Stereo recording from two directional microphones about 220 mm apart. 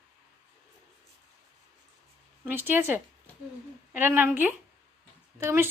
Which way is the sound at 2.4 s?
10° right (ahead or behind).